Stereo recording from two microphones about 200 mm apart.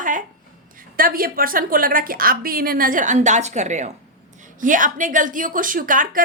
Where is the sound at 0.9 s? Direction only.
45° right (ahead or behind).